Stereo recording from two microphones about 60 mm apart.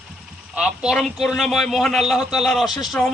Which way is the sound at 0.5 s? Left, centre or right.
Centre.